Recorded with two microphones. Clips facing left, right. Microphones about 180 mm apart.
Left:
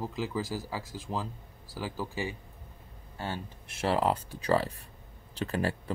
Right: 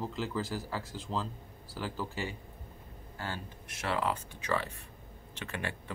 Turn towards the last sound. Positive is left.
turn(degrees=35)  # may be behind; listen again after turning